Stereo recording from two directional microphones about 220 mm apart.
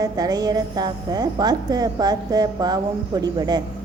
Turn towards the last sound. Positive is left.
turn(degrees=-20)  # may be behind; listen again after turning